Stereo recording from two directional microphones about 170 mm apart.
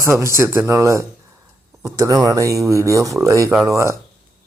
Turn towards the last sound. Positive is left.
turn(degrees=-15)  # may be behind; listen again after turning